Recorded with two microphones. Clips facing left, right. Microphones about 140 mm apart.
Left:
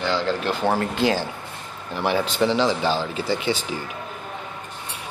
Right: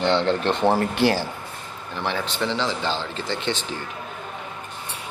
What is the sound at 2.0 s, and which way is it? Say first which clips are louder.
Speech: left 5 dB; 10° left (ahead or behind).